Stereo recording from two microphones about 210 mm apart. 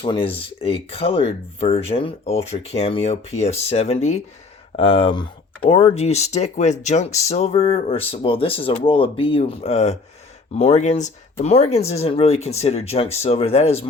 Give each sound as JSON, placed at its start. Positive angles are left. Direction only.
{"t": 0.0, "sound": "speech", "side_deg": 25}